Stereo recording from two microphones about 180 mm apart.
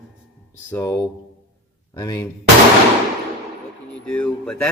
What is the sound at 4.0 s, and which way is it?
Speech, 5° left (ahead or behind).